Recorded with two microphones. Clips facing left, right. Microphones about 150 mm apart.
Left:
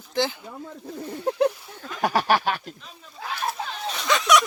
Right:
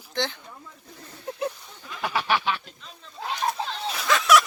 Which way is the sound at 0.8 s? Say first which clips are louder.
Left 10 dB; 90° left.